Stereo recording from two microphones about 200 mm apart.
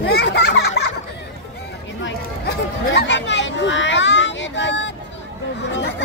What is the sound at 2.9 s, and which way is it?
A child's voice, 60° left (ahead or behind).